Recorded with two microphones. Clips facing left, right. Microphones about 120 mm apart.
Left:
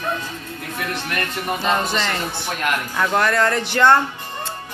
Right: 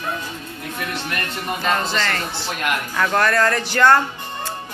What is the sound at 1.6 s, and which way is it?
Speech, 20° left (ahead or behind).